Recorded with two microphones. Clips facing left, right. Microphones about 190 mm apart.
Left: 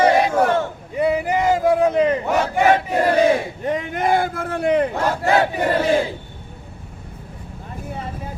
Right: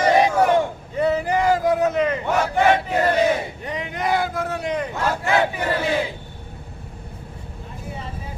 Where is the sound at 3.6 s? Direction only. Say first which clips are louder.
Left 5 dB; 45° left (ahead or behind).